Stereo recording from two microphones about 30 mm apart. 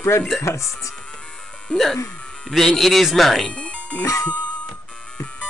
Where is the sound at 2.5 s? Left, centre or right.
Centre.